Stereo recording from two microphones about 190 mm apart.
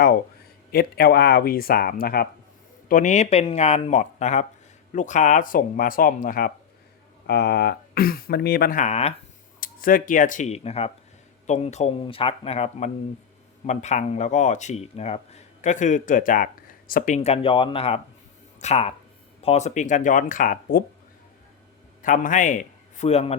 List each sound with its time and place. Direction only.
0.7 s speech: 55° left (ahead or behind)
2.9 s speech: 40° left (ahead or behind)
7.3 s speech: 60° left (ahead or behind); by 9.1 s 35° left (ahead or behind)
9.6 s speech: 45° left (ahead or behind)
17.2 s speech: 30° left (ahead or behind); by 20.8 s 45° left (ahead or behind)
22.0 s a man's voice: 45° left (ahead or behind)